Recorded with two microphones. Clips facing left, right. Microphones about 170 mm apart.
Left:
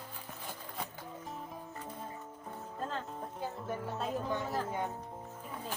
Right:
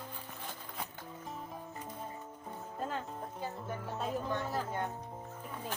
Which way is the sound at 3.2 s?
Centre (ahead or behind).